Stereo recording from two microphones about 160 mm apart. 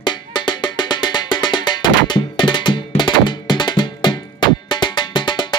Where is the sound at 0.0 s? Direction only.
25° left (ahead or behind).